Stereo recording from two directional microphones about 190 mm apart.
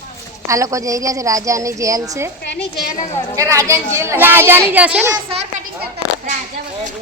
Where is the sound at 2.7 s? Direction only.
50° left (ahead or behind).